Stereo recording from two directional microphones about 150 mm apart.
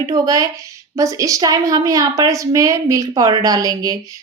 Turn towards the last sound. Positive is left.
turn(degrees=-25)  # may be behind; listen again after turning